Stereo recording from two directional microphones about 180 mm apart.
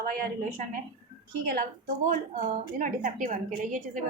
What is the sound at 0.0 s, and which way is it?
A woman's voice, 55° right (ahead or behind).